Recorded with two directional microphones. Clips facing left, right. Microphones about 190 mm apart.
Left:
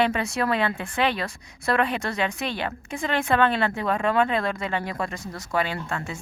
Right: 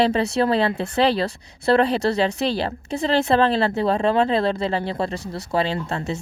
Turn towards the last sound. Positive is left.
turn(degrees=-30)  # may be behind; listen again after turning